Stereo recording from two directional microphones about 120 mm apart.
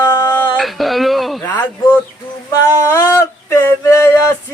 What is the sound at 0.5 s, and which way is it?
Speech, centre (ahead or behind).